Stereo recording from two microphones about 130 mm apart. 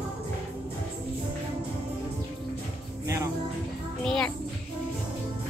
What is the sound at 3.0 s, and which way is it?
Music, 25° right (ahead or behind).